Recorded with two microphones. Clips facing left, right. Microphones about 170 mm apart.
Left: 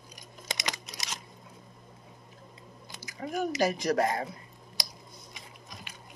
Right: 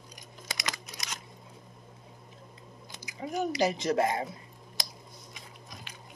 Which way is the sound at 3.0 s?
20° right (ahead or behind).